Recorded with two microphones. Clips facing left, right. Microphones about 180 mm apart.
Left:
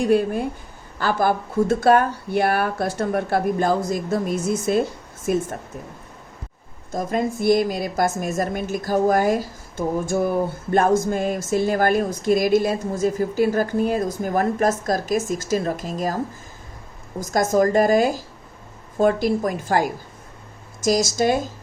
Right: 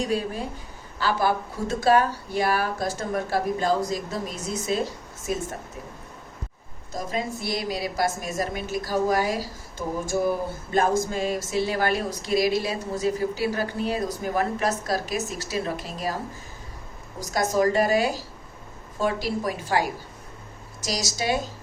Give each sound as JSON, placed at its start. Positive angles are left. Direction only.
{"t": 0.0, "sound": "speech", "side_deg": 55}
{"t": 6.9, "sound": "speech", "side_deg": 50}
{"t": 17.2, "sound": "speech", "side_deg": 50}